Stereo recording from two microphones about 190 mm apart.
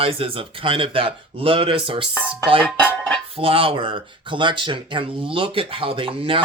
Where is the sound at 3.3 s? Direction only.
30° right (ahead or behind).